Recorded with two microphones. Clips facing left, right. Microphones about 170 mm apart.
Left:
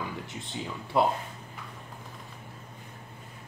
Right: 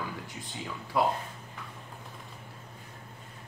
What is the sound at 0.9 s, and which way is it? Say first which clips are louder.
Speech: left 2 dB; 25° left (ahead or behind).